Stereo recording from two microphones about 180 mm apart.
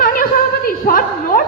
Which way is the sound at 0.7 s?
50° left (ahead or behind).